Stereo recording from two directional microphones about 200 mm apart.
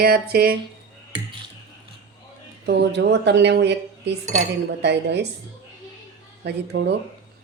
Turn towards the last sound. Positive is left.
turn(degrees=-55)  # may be behind; listen again after turning